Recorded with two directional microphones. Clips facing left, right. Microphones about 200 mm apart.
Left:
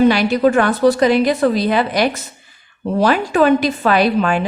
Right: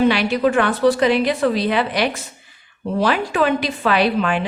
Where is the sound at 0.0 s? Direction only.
40° left (ahead or behind).